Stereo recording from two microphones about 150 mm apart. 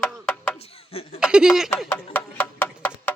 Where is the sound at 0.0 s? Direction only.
5° left (ahead or behind).